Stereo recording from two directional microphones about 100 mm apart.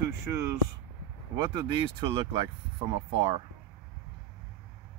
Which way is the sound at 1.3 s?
45° right (ahead or behind).